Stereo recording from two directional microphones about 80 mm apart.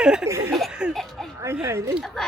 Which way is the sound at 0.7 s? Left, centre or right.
Centre.